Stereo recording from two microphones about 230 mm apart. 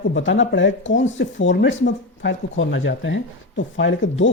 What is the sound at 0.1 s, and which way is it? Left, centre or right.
Speech, left.